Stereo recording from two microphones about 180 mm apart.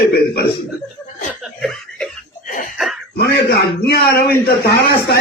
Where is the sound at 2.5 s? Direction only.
50° left (ahead or behind).